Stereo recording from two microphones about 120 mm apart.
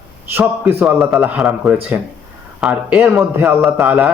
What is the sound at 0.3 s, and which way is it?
A man's voice, 20° right (ahead or behind).